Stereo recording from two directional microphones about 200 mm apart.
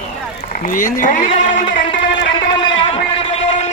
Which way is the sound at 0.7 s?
40° left (ahead or behind).